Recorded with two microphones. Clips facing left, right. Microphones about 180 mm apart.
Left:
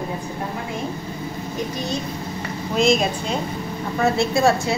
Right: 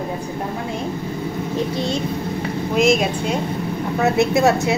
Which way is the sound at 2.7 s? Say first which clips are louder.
Right 1 dB; 10° right (ahead or behind).